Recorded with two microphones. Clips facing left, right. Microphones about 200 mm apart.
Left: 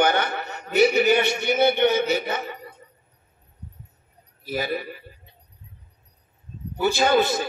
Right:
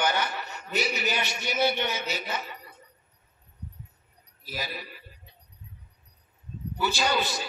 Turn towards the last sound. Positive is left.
turn(degrees=55)  # may be behind; listen again after turning